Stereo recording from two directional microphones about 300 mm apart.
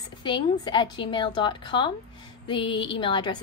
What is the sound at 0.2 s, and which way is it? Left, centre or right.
A woman's voice, centre.